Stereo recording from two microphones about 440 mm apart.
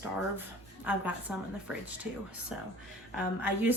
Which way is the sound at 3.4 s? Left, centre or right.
Centre.